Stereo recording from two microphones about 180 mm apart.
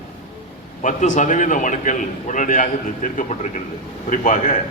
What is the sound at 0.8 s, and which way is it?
A man's voice, 45° left (ahead or behind).